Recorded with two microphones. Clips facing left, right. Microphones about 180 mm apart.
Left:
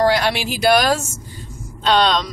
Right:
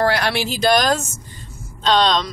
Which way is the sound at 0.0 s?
15° left (ahead or behind).